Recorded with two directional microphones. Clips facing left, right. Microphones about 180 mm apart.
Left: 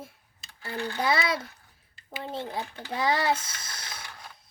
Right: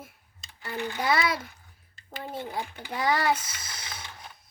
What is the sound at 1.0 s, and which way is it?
A child's voice, 25° left (ahead or behind).